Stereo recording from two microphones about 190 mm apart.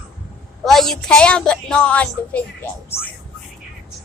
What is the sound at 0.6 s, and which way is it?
A woman's voice, centre (ahead or behind).